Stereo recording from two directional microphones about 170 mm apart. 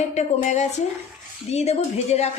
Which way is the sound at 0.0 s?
40° left (ahead or behind).